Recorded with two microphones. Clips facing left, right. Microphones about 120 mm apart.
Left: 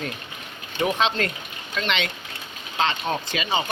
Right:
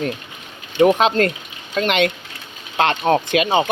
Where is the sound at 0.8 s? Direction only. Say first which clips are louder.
Right 9 dB; 50° right (ahead or behind).